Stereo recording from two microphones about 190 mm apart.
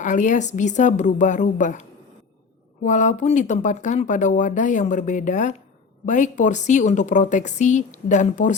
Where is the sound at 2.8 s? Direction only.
40° left (ahead or behind).